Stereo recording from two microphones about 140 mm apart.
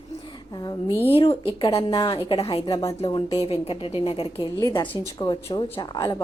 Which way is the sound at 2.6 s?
30° left (ahead or behind).